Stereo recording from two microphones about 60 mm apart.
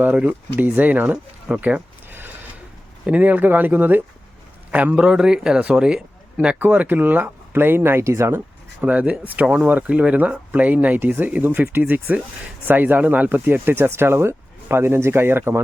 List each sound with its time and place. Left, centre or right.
0.0 s speech: right
2.0 s a sound: right
3.1 s a man's voice: right
4.9 s speech: centre
6.6 s speech: right
8.8 s speech: right